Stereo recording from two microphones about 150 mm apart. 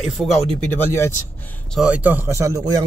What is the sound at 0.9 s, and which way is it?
Speech, 20° left (ahead or behind).